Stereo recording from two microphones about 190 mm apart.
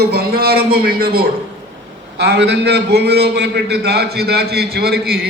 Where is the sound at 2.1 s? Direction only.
60° right (ahead or behind).